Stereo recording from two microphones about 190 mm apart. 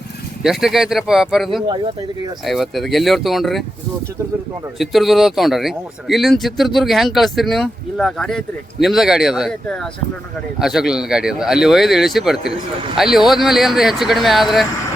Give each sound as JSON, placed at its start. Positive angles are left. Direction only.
{"t": 0.4, "sound": "speech", "side_deg": 0}
{"t": 1.6, "sound": "speech", "side_deg": -25}
{"t": 2.4, "sound": "speech", "side_deg": 0}
{"t": 4.8, "sound": "speech", "side_deg": 0}